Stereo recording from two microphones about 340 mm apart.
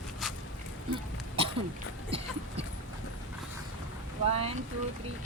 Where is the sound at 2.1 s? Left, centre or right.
Centre.